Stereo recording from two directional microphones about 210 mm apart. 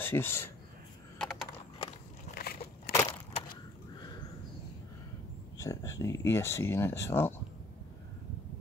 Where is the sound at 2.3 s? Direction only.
45° left (ahead or behind).